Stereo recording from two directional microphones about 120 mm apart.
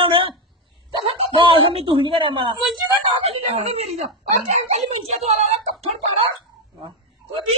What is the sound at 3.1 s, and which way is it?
Speech, 55° right (ahead or behind).